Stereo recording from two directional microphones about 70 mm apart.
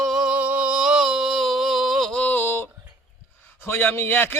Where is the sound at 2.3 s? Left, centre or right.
Left.